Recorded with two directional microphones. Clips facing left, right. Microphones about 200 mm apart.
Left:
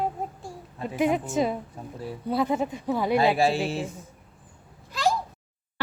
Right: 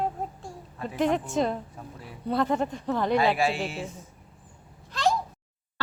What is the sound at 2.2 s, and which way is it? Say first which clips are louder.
Speech: even; 5° left (ahead or behind).